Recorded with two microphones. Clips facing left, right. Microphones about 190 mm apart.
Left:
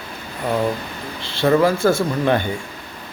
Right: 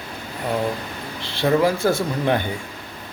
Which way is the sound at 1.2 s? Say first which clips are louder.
Left 3 dB; 15° right (ahead or behind).